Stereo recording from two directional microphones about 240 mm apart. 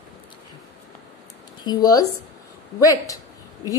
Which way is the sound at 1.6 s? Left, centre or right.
Centre.